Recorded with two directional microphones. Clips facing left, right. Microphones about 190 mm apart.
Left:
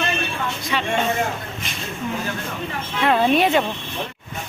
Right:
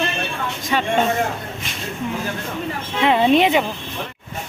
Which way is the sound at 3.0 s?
15° right (ahead or behind).